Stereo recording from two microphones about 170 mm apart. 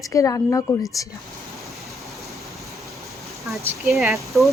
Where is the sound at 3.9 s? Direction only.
Centre (ahead or behind).